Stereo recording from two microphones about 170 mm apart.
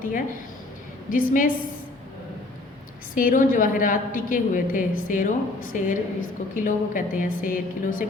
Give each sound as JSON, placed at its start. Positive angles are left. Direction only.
{"t": 1.1, "sound": "a woman's voice", "side_deg": 55}
{"t": 3.2, "sound": "a woman's voice", "side_deg": 55}